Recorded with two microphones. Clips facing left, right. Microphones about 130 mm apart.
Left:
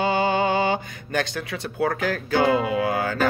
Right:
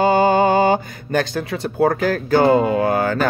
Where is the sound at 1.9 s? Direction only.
45° right (ahead or behind).